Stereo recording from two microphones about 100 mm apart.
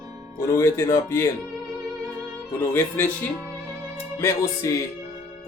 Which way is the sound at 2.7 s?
20° left (ahead or behind).